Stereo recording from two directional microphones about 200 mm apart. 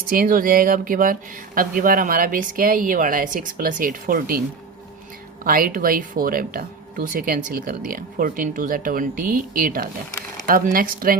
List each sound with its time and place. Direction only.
0.1 s speech: 45° right (ahead or behind)